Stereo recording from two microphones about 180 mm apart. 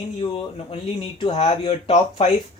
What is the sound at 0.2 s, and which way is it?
Speech, 30° left (ahead or behind).